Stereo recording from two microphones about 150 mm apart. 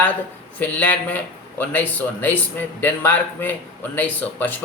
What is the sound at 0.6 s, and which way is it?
Speech, 10° left (ahead or behind).